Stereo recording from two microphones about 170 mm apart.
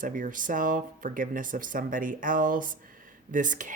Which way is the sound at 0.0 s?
50° right (ahead or behind).